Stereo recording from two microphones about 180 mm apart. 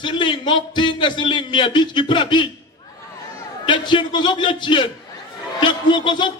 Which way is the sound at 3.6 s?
25° left (ahead or behind).